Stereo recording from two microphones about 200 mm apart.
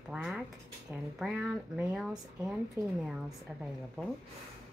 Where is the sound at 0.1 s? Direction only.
Centre (ahead or behind).